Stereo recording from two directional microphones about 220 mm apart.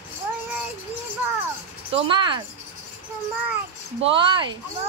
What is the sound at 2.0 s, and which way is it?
Speech, 20° right (ahead or behind).